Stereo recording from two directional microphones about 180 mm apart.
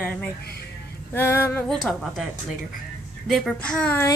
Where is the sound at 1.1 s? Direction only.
15° left (ahead or behind).